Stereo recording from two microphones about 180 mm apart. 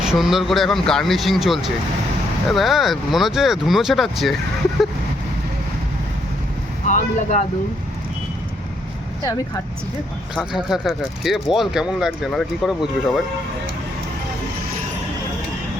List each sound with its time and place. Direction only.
0.0 s speech: centre (ahead or behind)
6.8 s speech: 40° left (ahead or behind)
10.3 s speech: centre (ahead or behind)